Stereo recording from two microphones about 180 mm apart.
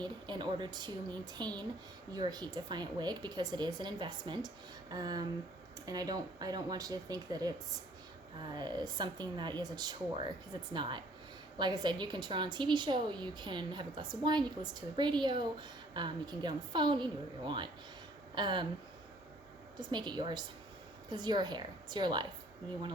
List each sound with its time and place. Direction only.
0.0 s a woman's voice: 25° right (ahead or behind)
19.8 s a woman's voice: 25° right (ahead or behind)